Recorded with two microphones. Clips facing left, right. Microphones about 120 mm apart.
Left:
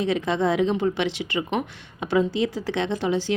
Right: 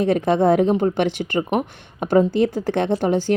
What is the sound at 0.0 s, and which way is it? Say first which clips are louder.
Speech: right 6 dB; 50° right (ahead or behind).